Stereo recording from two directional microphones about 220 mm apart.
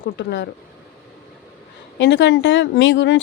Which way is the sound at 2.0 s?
55° left (ahead or behind).